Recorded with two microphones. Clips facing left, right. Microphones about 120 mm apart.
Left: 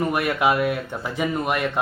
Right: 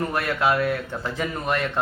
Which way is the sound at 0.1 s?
15° left (ahead or behind).